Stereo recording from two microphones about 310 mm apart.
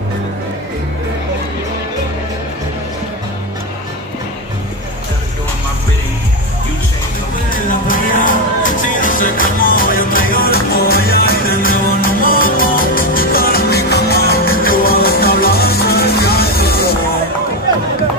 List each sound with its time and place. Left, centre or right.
7.4 s music: left